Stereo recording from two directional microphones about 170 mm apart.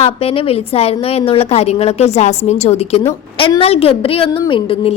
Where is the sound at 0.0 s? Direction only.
35° left (ahead or behind).